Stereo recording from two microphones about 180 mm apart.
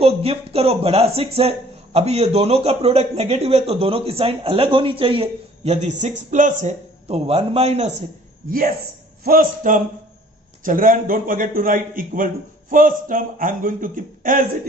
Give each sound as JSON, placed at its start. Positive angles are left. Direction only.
{"t": 0.0, "sound": "speech", "side_deg": -35}
{"t": 9.2, "sound": "a man's voice", "side_deg": -50}